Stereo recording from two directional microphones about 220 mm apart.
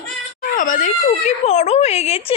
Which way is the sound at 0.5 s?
35° left (ahead or behind).